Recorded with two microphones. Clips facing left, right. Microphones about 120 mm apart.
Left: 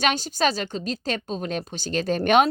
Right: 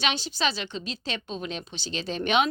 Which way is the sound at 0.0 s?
45° left (ahead or behind).